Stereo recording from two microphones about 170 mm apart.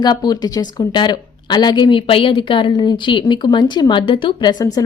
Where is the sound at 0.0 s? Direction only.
25° left (ahead or behind).